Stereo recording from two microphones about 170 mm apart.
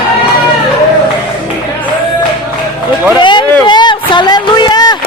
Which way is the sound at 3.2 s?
30° left (ahead or behind).